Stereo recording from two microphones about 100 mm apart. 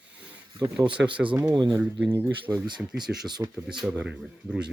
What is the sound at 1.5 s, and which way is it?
Speech, 50° right (ahead or behind).